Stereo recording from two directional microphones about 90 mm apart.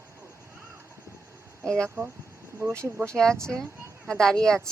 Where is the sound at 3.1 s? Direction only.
5° left (ahead or behind).